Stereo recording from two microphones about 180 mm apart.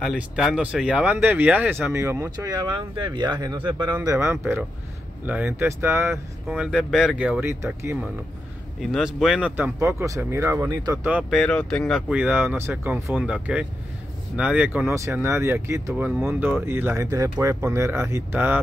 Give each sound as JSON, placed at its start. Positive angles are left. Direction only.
{"t": 0.0, "sound": "speech", "side_deg": 0}
{"t": 8.8, "sound": "speech", "side_deg": 0}
{"t": 11.2, "sound": "speech", "side_deg": 0}
{"t": 12.1, "sound": "speech", "side_deg": -10}